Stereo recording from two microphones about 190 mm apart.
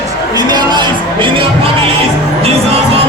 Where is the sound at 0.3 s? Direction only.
20° right (ahead or behind).